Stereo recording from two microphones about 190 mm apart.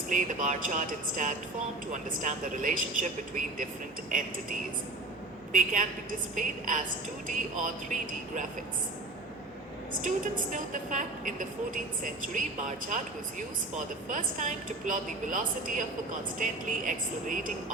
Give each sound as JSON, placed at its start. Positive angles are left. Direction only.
{"t": 0.1, "sound": "a woman's voice", "side_deg": -40}
{"t": 9.9, "sound": "a woman's voice", "side_deg": -45}